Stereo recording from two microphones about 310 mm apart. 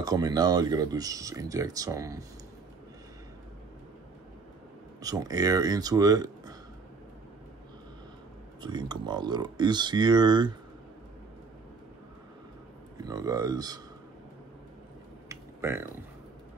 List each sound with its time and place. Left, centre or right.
0.0 s speech: centre
5.0 s speech: centre
8.6 s speech: centre
12.9 s speech: centre
15.2 s a sound: centre